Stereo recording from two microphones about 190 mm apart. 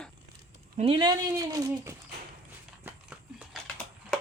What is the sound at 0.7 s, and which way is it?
Speech, 30° right (ahead or behind).